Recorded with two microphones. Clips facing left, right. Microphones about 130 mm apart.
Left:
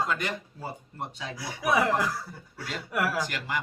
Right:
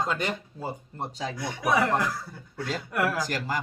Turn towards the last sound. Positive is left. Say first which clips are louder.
# right 3 dB
turn(degrees=-40)  # may be behind; listen again after turning